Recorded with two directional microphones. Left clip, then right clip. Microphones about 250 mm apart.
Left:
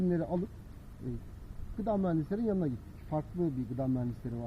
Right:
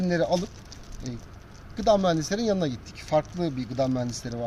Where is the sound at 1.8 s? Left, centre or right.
Right.